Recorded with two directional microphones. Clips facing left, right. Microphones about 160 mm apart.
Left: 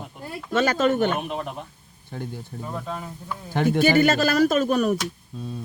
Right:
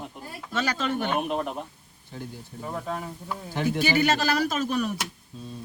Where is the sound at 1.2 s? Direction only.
Centre (ahead or behind).